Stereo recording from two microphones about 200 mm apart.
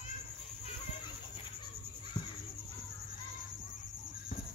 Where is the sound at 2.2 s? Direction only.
20° left (ahead or behind).